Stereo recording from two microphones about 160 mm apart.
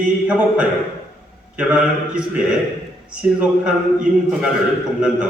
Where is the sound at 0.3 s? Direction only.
5° right (ahead or behind).